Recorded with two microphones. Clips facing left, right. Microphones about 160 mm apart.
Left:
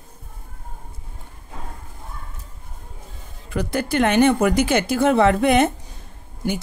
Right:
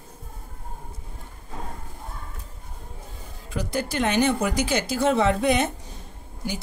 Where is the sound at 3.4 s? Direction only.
60° left (ahead or behind).